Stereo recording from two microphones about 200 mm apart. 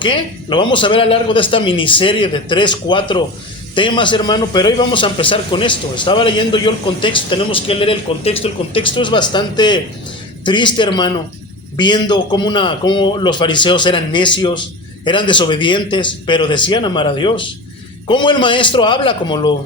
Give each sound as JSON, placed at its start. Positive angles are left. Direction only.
{"t": 0.0, "sound": "a man's voice", "side_deg": 25}